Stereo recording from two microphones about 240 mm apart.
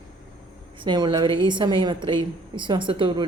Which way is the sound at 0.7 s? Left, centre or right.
Centre.